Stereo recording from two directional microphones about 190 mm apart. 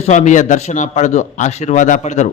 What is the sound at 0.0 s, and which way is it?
A man's voice, 40° left (ahead or behind).